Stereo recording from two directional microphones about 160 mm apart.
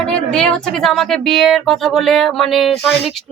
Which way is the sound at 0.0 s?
5° left (ahead or behind).